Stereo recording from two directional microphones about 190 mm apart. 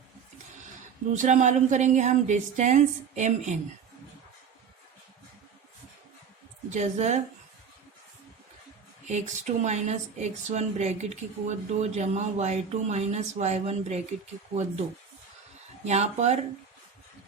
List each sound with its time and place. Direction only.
1.1 s speech: 40° right (ahead or behind)
6.7 s speech: 35° right (ahead or behind)
9.0 s speech: 40° right (ahead or behind)